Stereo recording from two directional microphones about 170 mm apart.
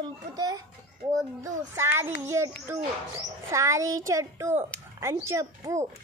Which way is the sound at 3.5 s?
15° right (ahead or behind).